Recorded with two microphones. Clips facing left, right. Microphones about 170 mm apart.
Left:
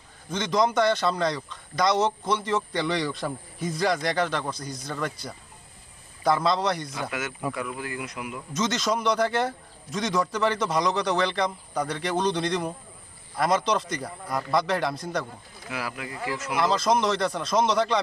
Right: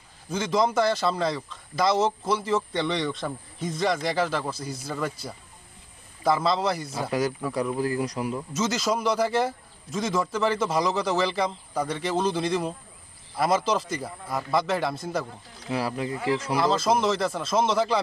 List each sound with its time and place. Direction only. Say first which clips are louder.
0.3 s a man's voice: even; 5° right (ahead or behind)
7.1 s speech: right 9 dB; 35° right (ahead or behind)
8.5 s a man's voice: left 1 dB; 5° right (ahead or behind)
15.7 s speech: right 6 dB; 30° right (ahead or behind)
16.6 s a man's voice: left 2 dB; centre (ahead or behind)